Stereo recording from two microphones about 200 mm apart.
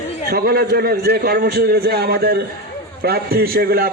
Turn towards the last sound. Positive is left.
turn(degrees=-50)  # may be behind; listen again after turning